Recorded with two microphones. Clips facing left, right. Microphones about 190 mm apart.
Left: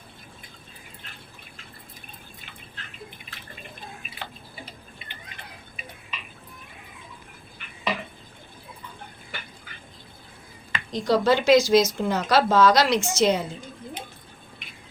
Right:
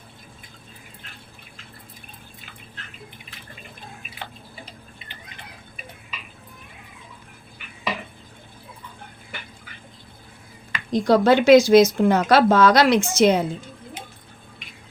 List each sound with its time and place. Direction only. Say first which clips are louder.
10.9 s a woman's voice: right 5 dB; 55° right (ahead or behind)